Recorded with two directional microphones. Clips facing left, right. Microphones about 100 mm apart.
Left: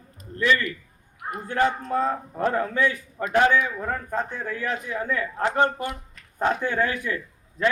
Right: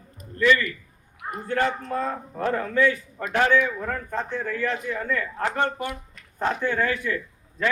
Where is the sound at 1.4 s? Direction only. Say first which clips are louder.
Left 1 dB; 20° left (ahead or behind).